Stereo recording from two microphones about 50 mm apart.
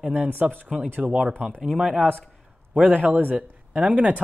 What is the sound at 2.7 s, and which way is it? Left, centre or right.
Speech, right.